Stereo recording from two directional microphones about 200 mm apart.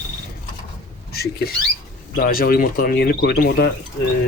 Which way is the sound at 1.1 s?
50° left (ahead or behind).